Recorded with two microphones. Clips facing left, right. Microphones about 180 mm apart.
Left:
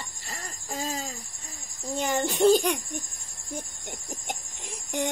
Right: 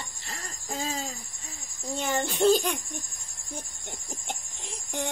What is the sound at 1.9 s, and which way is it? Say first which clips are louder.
Child singing: left 2 dB; 15° left (ahead or behind).